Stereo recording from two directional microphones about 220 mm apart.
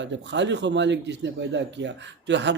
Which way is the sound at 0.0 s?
55° right (ahead or behind).